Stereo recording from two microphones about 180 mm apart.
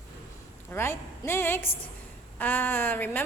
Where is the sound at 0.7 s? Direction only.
15° left (ahead or behind).